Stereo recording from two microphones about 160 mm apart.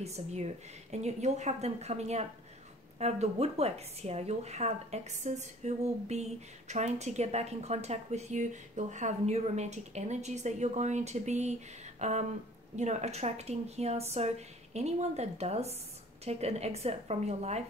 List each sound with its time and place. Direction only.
0.0 s a woman's voice: 45° right (ahead or behind)